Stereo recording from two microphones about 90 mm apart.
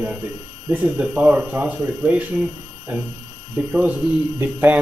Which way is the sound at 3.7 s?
15° right (ahead or behind).